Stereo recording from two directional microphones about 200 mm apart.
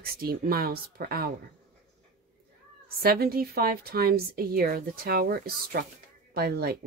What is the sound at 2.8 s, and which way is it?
A woman's voice, 50° right (ahead or behind).